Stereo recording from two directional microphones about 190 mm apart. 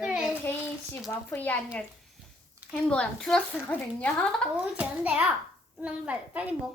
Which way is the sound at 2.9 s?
5° left (ahead or behind).